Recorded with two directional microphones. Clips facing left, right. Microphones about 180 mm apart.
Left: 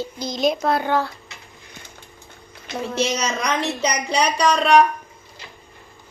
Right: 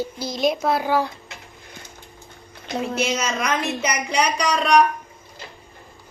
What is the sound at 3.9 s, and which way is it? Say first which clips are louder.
Speech: left 1 dB; 30° left (ahead or behind).